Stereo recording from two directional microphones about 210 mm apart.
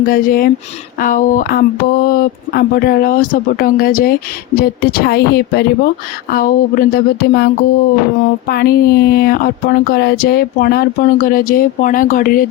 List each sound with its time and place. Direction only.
0.0 s speech: 45° left (ahead or behind)